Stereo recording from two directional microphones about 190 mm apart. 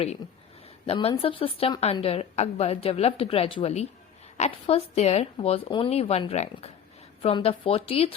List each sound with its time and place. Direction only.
0.9 s a woman's voice: 30° left (ahead or behind)